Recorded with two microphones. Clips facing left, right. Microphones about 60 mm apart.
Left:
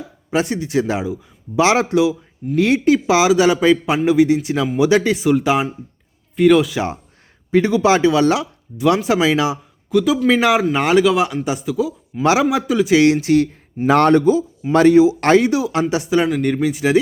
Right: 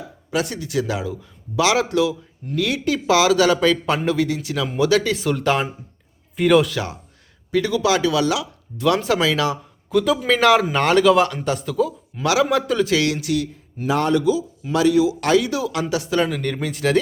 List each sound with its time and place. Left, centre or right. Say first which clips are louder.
0.3 s a man's voice: left 4 dB; left
5.2 s a man's voice: left 4 dB; centre
6.7 s a man's voice: left 5 dB; left
8.8 s a man's voice: left 3 dB; centre
9.9 s a man's voice: left 3 dB; centre
12.2 s a man's voice: left 3 dB; left
12.5 s a man's voice: left 2 dB; centre
12.9 s speech: left 7 dB; left
13.8 s a man's voice: left 6 dB; left
15.4 s a man's voice: left 5 dB; left; by 17.0 s centre